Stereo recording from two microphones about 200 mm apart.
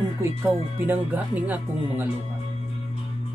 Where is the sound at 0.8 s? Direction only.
10° right (ahead or behind).